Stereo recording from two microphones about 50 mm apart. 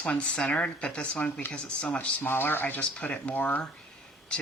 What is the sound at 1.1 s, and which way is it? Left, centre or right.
Speech, left.